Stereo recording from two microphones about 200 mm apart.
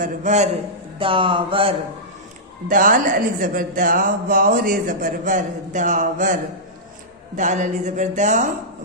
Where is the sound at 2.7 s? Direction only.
40° right (ahead or behind).